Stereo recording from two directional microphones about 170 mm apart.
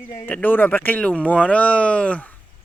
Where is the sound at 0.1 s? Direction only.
20° left (ahead or behind).